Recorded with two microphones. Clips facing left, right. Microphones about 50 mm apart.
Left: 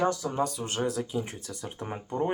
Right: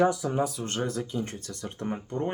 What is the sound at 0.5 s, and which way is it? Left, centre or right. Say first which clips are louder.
Speech: left 1 dB; centre.